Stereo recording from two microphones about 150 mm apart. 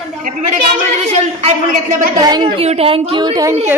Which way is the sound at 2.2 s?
30° right (ahead or behind).